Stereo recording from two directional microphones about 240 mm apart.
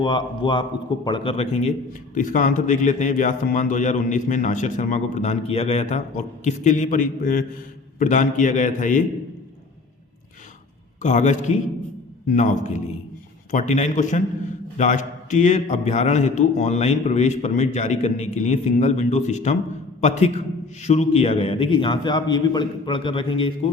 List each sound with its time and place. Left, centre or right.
0.0 s a man's voice: centre
11.0 s a man's voice: left